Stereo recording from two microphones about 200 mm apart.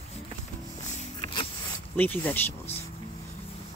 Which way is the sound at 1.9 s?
10° left (ahead or behind).